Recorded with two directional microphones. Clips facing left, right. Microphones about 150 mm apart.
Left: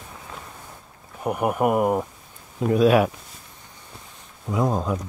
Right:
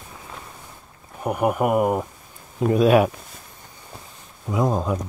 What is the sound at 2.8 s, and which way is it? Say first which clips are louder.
Speech: right 1 dB; 20° right (ahead or behind).